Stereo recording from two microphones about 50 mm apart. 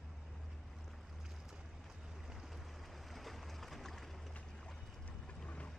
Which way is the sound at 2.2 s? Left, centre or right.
Centre.